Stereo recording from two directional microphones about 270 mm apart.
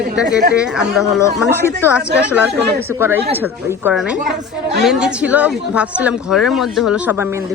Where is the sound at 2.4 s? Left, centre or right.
Centre.